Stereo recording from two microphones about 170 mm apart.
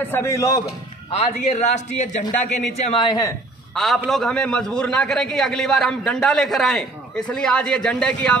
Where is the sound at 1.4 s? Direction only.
40° left (ahead or behind).